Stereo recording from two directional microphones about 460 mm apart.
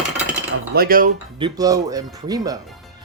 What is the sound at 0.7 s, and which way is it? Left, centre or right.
Speech, centre.